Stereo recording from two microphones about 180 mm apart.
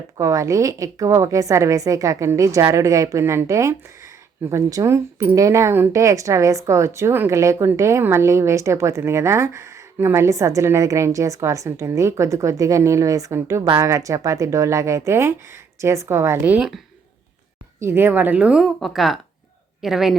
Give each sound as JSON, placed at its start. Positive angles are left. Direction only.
{"t": 0.2, "sound": "a man's voice", "side_deg": -20}